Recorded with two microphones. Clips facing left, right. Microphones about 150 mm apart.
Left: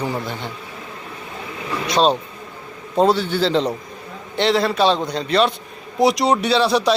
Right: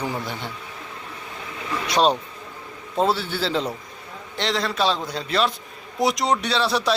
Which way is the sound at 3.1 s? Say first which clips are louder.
Left 6 dB; 5° right (ahead or behind).